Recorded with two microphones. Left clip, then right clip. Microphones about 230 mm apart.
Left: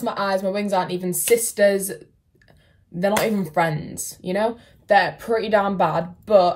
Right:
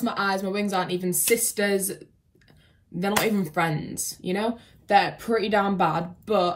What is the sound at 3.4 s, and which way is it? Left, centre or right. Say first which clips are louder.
A woman's voice: left 4 dB; centre.